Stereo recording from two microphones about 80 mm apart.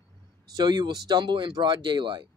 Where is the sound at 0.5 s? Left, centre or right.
Right.